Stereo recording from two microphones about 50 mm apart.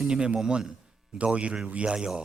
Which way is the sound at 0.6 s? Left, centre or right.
Centre.